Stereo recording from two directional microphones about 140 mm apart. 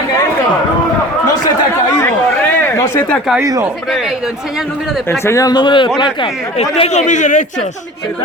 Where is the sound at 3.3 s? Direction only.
20° right (ahead or behind).